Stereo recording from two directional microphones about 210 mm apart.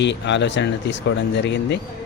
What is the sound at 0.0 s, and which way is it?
Speech, 60° left (ahead or behind).